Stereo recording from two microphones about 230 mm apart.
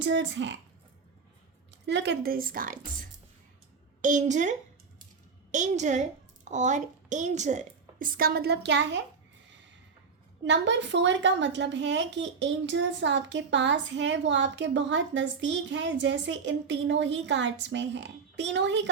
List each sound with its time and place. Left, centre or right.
0.0 s a woman's voice: right
1.9 s a woman's voice: right
10.4 s a woman's voice: right